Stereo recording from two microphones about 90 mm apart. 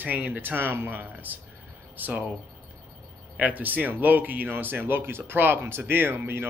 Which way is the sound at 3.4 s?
15° right (ahead or behind).